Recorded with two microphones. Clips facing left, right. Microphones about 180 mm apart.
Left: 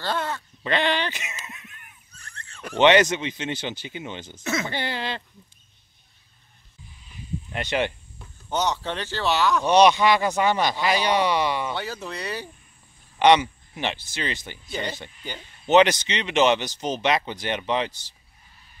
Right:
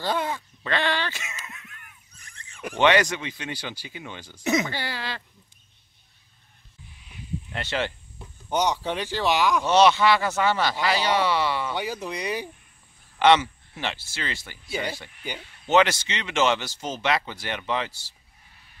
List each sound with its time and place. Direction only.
0.0 s a sound: 10° right (ahead or behind)
0.7 s a sound: 20° left (ahead or behind)
2.1 s a sound: 15° right (ahead or behind)
2.8 s speech: 20° left (ahead or behind)
4.4 s speech: 15° right (ahead or behind)
4.6 s speech: 20° left (ahead or behind)
7.5 s speech: 15° left (ahead or behind)
8.2 s speech: 15° right (ahead or behind)
9.7 s speech: 15° left (ahead or behind)
11.7 s speech: 15° right (ahead or behind)
13.2 s speech: 15° left (ahead or behind)
14.7 s speech: 10° right (ahead or behind)
15.6 s speech: 20° left (ahead or behind)